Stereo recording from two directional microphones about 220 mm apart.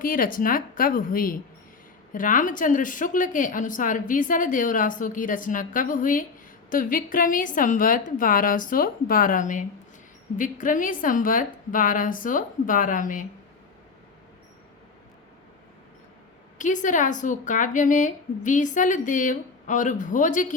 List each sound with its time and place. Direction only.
0.0 s a woman's voice: 40° left (ahead or behind)
16.6 s a woman's voice: 35° left (ahead or behind)